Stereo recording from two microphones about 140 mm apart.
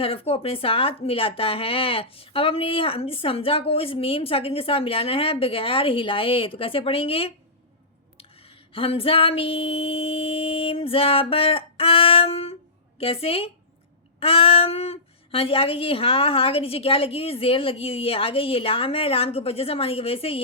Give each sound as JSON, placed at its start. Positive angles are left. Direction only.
{"t": 0.0, "sound": "a woman's voice", "side_deg": 40}